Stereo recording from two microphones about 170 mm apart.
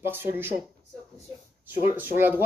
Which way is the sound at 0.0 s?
15° right (ahead or behind).